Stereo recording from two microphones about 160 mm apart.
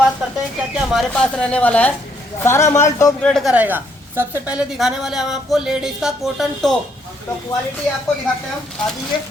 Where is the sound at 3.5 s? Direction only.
10° right (ahead or behind).